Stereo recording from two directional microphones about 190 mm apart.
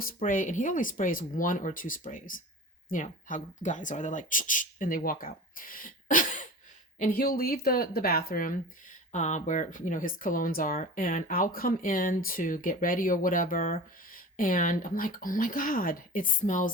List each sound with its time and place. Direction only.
0.0 s speech: 45° left (ahead or behind)